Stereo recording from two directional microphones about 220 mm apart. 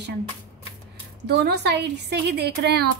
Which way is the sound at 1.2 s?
50° right (ahead or behind).